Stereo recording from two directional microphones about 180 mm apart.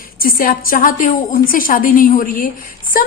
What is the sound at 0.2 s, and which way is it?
A woman's voice, 50° left (ahead or behind).